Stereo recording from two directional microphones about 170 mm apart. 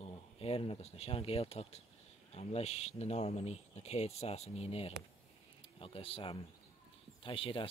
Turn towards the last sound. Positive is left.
turn(degrees=30)  # may be behind; listen again after turning